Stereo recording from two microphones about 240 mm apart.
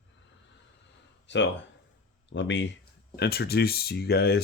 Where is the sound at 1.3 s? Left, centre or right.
Left.